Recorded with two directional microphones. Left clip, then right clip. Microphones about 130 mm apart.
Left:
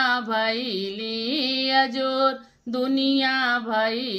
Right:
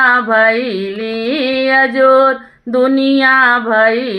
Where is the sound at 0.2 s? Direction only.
20° left (ahead or behind).